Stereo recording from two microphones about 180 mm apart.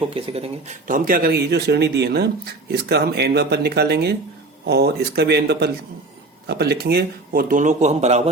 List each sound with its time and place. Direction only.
0.1 s speech: 35° right (ahead or behind)
0.9 s speech: 50° right (ahead or behind)